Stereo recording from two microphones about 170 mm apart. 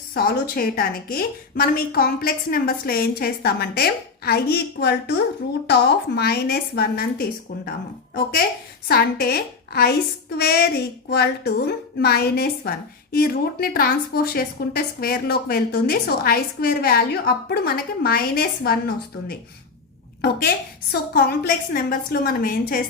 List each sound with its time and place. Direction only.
0.1 s a woman's voice: 65° left (ahead or behind)
8.9 s a woman's voice: 65° left (ahead or behind)
20.9 s a woman's voice: 70° left (ahead or behind)